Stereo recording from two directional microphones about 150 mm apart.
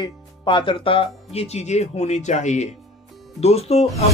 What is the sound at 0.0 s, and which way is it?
Speech, 35° left (ahead or behind).